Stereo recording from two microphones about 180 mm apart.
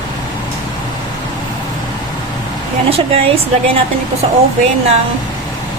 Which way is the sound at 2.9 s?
30° right (ahead or behind).